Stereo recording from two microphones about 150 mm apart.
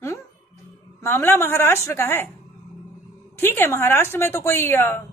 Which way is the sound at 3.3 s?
15° left (ahead or behind).